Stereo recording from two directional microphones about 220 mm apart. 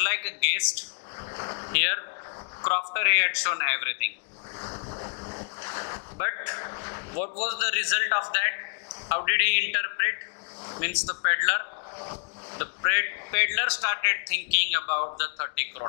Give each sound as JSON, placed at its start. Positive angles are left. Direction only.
{"t": 0.0, "sound": "a man's voice", "side_deg": 15}
{"t": 4.6, "sound": "a man's voice", "side_deg": 25}